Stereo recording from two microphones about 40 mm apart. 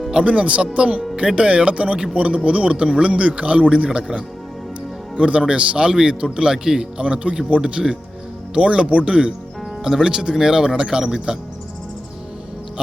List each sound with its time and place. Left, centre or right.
0.1 s speech: right
5.1 s a man's voice: right
7.0 s a man's voice: right
9.8 s speech: centre